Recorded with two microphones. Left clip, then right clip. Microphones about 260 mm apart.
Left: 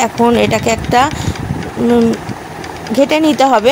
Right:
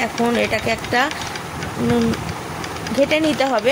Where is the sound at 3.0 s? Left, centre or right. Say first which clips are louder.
Left 7 dB; left.